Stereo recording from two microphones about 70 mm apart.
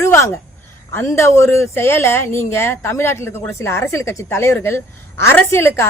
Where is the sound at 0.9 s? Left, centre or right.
Left.